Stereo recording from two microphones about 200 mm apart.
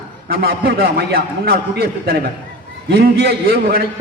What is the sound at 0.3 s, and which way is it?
A man's voice, 50° right (ahead or behind).